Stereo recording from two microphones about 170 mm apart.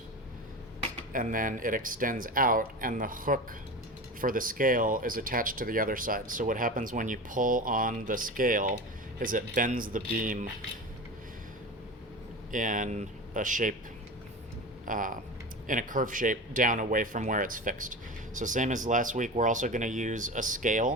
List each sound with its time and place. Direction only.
1.1 s speech: 55° right (ahead or behind)
12.5 s speech: 50° right (ahead or behind)
14.8 s speech: 50° right (ahead or behind)